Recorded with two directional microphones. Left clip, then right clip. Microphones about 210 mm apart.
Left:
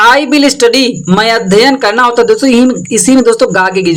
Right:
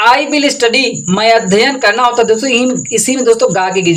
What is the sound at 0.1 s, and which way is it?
Speech, 35° left (ahead or behind).